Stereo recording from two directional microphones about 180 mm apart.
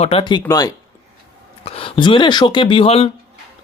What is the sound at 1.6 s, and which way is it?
Speech, 30° left (ahead or behind).